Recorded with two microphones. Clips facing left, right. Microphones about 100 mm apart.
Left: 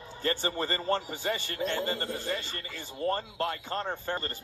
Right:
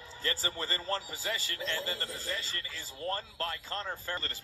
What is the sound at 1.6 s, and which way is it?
Speech, 55° left (ahead or behind).